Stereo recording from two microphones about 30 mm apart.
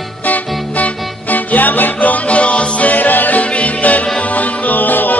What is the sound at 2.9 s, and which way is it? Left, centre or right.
Music, left.